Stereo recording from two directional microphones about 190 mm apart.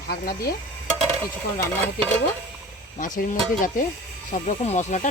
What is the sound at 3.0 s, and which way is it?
Speech, 45° left (ahead or behind).